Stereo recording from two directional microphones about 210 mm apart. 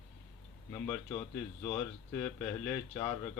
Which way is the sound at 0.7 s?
10° left (ahead or behind).